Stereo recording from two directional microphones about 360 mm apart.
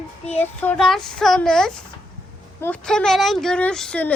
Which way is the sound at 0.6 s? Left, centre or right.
Centre.